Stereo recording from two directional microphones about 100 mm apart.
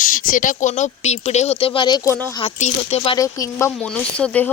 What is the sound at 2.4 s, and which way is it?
Speech, 90° left.